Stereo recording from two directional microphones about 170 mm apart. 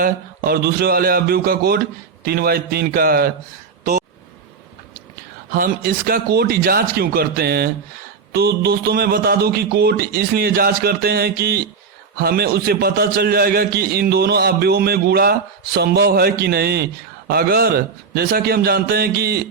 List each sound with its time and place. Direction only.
0.0 s a man's voice: 65° right (ahead or behind)
5.5 s a man's voice: 55° right (ahead or behind)